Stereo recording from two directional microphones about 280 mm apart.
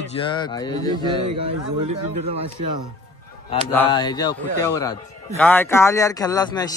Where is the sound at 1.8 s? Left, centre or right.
Right.